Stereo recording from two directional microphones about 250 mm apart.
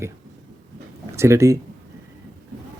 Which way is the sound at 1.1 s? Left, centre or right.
Centre.